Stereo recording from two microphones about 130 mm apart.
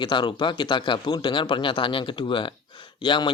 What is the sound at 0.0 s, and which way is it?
Speech, 35° left (ahead or behind).